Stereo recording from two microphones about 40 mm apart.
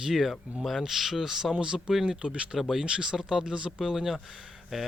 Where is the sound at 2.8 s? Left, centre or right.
Centre.